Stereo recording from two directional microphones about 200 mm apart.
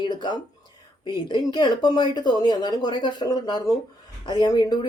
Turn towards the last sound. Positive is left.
turn(degrees=20)  # may be behind; listen again after turning